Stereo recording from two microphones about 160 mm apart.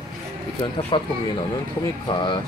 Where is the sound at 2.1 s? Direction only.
30° left (ahead or behind).